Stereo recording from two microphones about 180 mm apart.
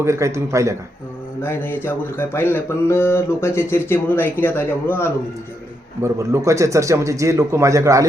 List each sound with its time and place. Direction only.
0.0 s a man's voice: 15° right (ahead or behind)
1.4 s mantra: 10° left (ahead or behind)
6.0 s a man's voice: 15° right (ahead or behind)